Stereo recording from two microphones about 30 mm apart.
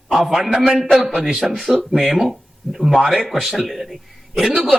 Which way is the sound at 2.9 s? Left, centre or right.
Centre.